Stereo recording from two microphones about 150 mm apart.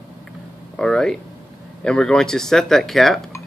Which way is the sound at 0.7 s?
5° left (ahead or behind).